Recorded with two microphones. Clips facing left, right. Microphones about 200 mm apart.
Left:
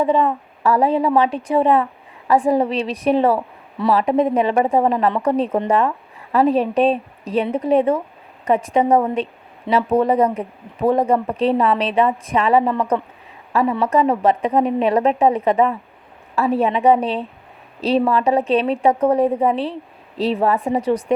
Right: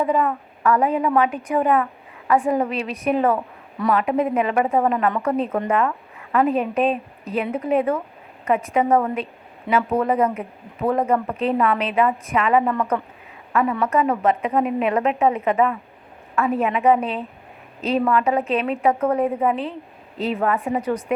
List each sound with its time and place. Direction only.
0.0 s a woman's voice: 30° left (ahead or behind)